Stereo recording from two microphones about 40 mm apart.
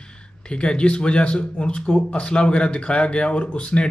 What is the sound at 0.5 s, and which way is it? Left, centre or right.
Speech, left.